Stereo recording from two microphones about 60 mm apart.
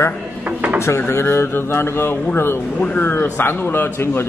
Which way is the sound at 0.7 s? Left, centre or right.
Left.